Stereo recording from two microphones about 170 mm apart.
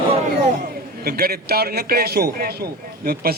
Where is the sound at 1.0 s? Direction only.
65° right (ahead or behind).